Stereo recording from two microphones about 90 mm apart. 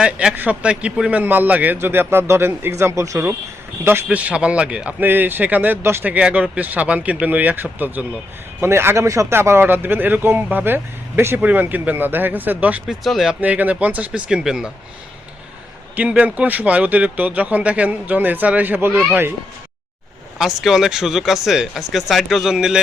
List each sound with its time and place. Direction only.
0.0 s a man's voice: 10° right (ahead or behind); by 3.3 s 35° right (ahead or behind)
3.8 s a man's voice: 20° right (ahead or behind)
13.1 s speech: centre (ahead or behind)
13.4 s speech: 15° right (ahead or behind)
16.0 s speech: 15° right (ahead or behind)
20.4 s speech: 5° right (ahead or behind)